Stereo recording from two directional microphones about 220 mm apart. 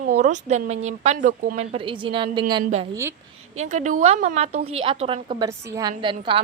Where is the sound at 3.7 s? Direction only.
35° right (ahead or behind).